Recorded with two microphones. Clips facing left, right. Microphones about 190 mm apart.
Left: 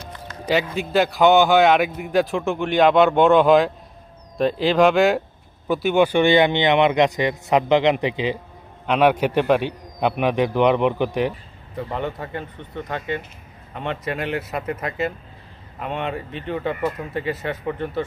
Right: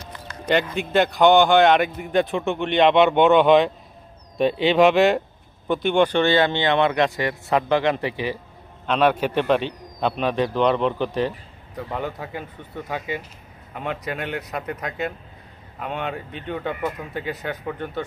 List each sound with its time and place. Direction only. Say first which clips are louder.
0.5 s a man's voice: even; centre (ahead or behind)
11.7 s a man's voice: left 2 dB; centre (ahead or behind)